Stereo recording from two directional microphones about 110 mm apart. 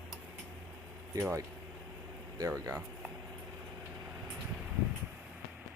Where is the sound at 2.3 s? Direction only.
35° right (ahead or behind).